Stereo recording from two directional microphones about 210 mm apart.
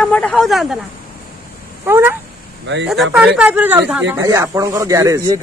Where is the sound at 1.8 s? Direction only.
10° right (ahead or behind).